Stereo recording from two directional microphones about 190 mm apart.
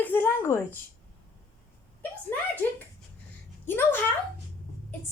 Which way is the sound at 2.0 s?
10° left (ahead or behind).